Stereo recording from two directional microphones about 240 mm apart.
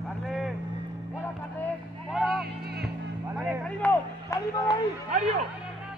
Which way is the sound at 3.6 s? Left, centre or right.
Centre.